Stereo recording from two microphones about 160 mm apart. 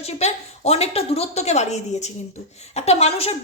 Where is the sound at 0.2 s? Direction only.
40° left (ahead or behind).